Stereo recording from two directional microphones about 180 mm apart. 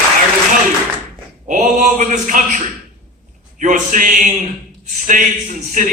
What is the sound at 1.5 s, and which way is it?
Male singing, 45° right (ahead or behind).